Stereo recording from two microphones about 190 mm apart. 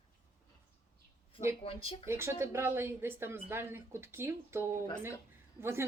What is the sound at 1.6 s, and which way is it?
Speech, 30° left (ahead or behind).